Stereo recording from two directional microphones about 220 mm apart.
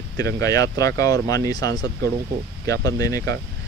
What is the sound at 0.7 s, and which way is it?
Speech, 15° left (ahead or behind).